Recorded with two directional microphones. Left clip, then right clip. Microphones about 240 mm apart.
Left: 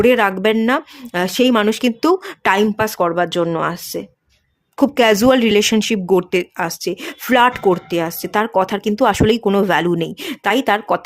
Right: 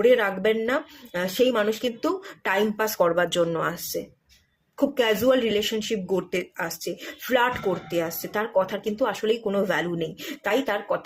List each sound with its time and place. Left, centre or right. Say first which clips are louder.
0.0 s speech: left 6 dB; left